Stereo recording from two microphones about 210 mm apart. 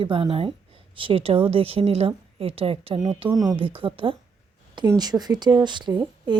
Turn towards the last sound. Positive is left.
turn(degrees=-20)  # may be behind; listen again after turning